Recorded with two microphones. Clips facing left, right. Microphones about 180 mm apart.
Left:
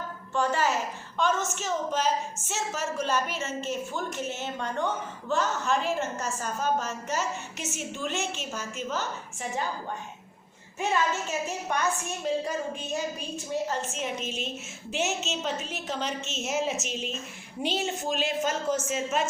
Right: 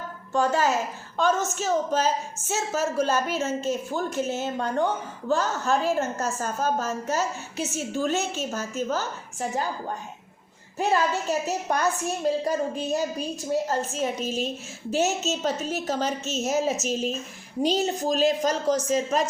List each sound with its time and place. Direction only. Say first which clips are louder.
1.1 s a woman's voice: right 4 dB; 40° right (ahead or behind)
10.8 s a woman's voice: right 4 dB; 35° right (ahead or behind)